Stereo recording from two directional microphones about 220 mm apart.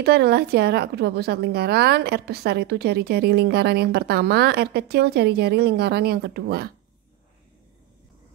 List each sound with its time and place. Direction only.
0.0 s a woman's voice: 45° right (ahead or behind)